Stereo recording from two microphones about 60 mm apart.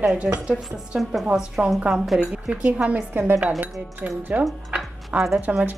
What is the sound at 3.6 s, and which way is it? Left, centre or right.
Speech, right.